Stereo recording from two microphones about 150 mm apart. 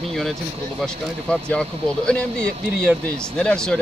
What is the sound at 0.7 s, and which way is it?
Speech, 5° left (ahead or behind).